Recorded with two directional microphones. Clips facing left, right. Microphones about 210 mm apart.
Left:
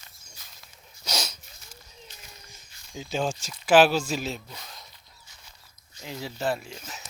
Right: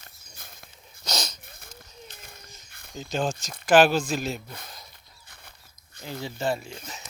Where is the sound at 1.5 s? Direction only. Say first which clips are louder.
Right 4 dB; 55° right (ahead or behind).